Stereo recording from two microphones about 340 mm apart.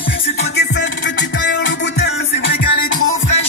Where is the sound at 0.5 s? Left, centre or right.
Left.